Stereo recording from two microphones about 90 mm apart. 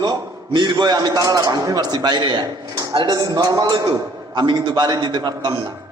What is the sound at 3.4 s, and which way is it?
Speech, 40° right (ahead or behind).